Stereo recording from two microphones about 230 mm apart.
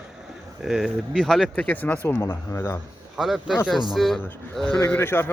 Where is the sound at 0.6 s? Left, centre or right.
Centre.